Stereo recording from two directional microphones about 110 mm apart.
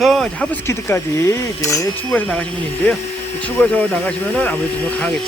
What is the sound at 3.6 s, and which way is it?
Speech, 15° left (ahead or behind).